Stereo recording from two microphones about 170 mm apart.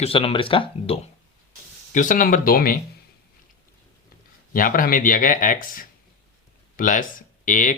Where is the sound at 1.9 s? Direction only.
50° left (ahead or behind).